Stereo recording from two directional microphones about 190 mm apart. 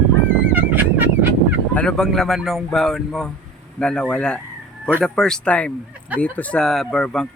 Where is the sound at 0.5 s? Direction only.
10° right (ahead or behind).